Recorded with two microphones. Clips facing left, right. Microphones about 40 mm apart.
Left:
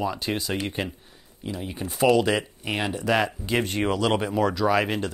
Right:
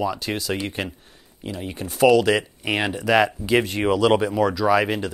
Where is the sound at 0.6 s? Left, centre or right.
Centre.